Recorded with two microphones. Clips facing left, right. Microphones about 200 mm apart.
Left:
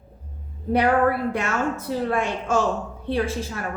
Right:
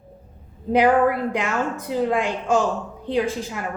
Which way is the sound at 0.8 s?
15° right (ahead or behind).